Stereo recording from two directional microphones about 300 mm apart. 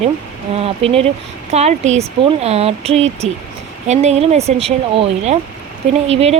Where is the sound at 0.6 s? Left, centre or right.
Centre.